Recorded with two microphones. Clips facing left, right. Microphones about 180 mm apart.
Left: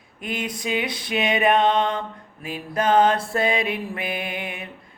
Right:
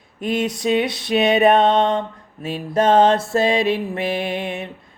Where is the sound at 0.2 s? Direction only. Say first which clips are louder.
Right 8 dB; 25° right (ahead or behind).